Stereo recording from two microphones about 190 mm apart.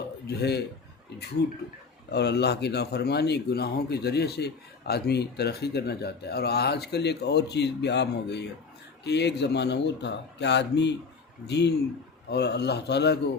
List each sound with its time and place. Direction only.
0.3 s speech: 60° left (ahead or behind)